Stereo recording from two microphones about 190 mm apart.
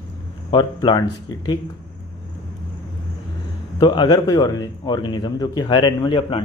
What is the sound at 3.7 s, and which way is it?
Speech, 25° left (ahead or behind).